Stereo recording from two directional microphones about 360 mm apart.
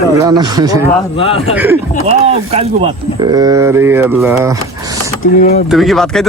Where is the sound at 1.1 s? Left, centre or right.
Centre.